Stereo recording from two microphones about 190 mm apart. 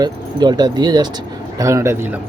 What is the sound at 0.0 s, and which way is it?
Speech, 20° right (ahead or behind).